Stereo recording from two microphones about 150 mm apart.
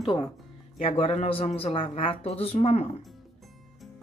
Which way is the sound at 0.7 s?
45° left (ahead or behind).